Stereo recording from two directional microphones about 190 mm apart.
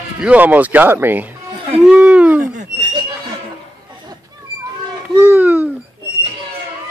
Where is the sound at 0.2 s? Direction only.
10° right (ahead or behind).